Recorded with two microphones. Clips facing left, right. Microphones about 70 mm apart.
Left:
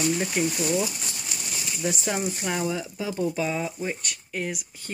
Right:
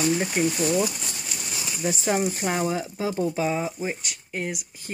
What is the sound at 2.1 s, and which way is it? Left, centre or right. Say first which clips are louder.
Speech: right 3 dB; right.